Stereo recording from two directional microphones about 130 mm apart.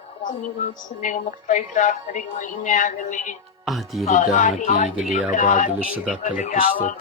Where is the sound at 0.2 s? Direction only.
80° left.